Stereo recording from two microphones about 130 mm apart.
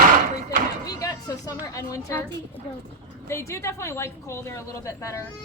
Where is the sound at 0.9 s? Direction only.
25° left (ahead or behind).